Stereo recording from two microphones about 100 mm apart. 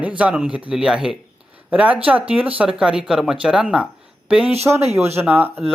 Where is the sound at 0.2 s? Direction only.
10° right (ahead or behind).